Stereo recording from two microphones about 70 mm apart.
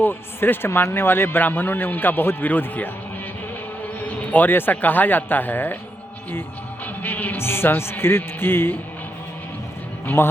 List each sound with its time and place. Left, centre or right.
0.0 s a man's voice: left
4.0 s a man's voice: left
7.0 s a man's voice: left
10.2 s speech: left